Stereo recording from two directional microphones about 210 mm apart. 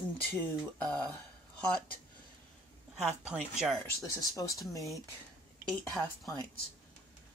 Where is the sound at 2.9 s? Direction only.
5° right (ahead or behind).